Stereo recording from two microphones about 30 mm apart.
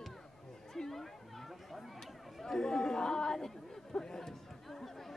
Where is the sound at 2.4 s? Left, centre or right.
Centre.